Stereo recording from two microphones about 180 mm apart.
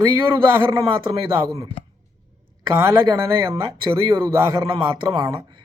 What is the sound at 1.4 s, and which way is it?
Speech, 20° right (ahead or behind).